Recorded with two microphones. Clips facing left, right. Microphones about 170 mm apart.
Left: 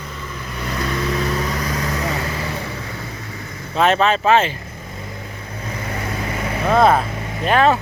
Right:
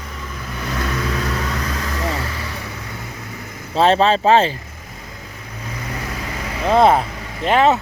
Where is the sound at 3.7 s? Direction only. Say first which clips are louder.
Right 2 dB; 30° right (ahead or behind).